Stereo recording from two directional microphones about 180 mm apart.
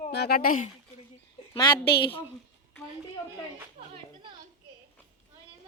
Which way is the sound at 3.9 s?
25° right (ahead or behind).